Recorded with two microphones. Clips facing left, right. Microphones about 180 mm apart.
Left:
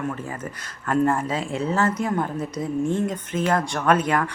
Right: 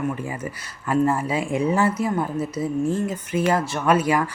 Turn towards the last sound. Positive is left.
turn(degrees=-10)  # may be behind; listen again after turning